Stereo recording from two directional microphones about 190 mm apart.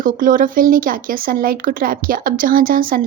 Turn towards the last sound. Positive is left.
turn(degrees=-45)  # may be behind; listen again after turning